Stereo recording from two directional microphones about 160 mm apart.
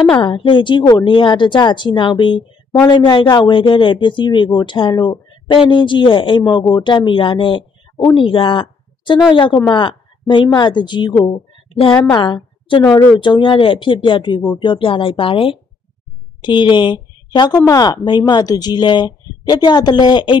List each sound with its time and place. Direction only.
0.1 s a woman's voice: 30° left (ahead or behind)